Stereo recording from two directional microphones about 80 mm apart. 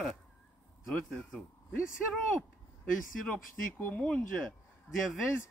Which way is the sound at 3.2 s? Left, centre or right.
Centre.